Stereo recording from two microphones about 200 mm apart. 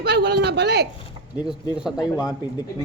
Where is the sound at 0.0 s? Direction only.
55° right (ahead or behind).